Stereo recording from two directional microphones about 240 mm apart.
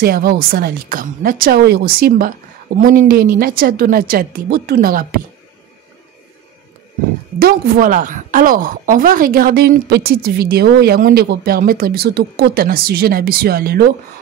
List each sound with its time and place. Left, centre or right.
0.0 s a woman's voice: right
7.3 s a woman's voice: right